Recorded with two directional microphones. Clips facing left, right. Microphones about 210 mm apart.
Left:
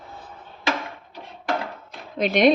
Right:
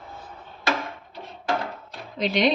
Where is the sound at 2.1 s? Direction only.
50° left (ahead or behind).